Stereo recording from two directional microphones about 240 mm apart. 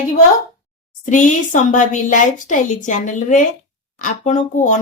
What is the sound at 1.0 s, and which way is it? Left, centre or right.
Speech, left.